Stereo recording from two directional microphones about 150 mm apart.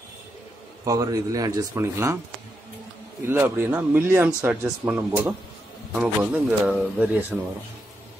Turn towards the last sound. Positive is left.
turn(degrees=-10)  # may be behind; listen again after turning